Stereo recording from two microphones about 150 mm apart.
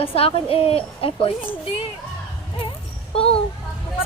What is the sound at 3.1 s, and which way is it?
Speech, 40° left (ahead or behind).